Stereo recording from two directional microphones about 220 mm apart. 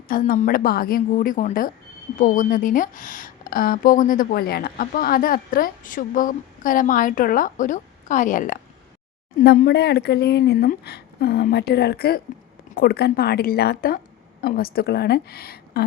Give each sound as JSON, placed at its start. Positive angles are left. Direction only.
{"t": 0.1, "sound": "a woman's voice", "side_deg": 40}